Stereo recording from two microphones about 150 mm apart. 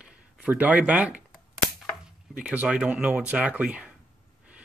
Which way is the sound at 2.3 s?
10° right (ahead or behind).